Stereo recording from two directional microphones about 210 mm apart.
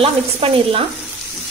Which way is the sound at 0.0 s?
25° right (ahead or behind).